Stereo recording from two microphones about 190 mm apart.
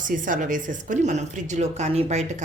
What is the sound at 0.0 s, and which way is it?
A woman's voice, 45° right (ahead or behind).